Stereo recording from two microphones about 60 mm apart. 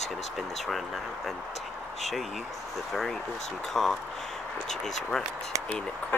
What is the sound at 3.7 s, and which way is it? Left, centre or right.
Speech, centre.